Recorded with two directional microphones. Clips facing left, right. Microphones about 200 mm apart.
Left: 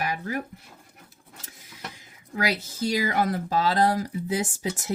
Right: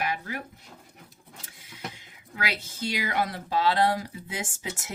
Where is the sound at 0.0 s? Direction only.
40° left (ahead or behind).